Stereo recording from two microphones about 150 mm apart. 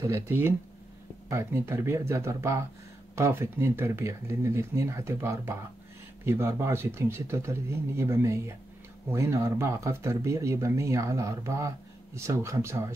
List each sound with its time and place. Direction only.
0.0 s speech: 15° right (ahead or behind)